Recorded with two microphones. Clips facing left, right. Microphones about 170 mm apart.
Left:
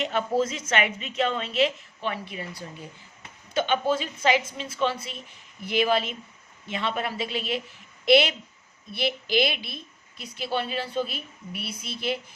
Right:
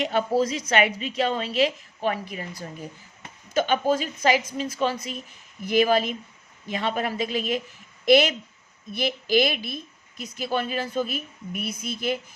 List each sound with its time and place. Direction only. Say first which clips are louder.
0.0 s a woman's voice: right 2 dB; 40° right (ahead or behind)
3.5 s a woman's voice: right 2 dB; 40° right (ahead or behind)